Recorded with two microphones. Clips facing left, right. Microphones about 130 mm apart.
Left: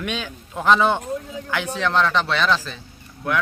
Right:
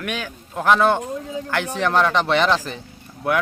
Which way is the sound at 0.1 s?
10° right (ahead or behind).